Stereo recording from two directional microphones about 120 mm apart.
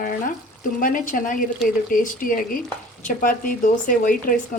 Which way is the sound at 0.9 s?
90° left.